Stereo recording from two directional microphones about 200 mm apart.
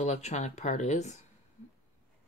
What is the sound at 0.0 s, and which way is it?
Speech, 35° left (ahead or behind).